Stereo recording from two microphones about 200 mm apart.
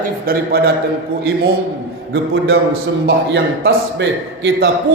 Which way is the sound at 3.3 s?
55° right (ahead or behind).